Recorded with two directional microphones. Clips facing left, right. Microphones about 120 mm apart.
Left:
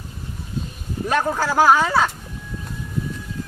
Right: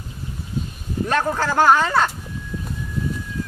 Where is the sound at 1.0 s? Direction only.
5° left (ahead or behind).